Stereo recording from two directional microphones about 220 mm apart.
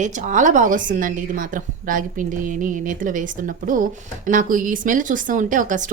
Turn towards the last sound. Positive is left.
turn(degrees=-35)  # may be behind; listen again after turning